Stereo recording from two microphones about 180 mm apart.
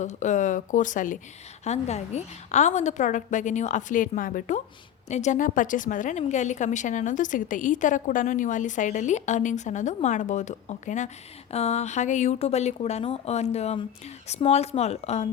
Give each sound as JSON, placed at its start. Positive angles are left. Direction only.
{"t": 0.0, "sound": "a woman's voice", "side_deg": 40}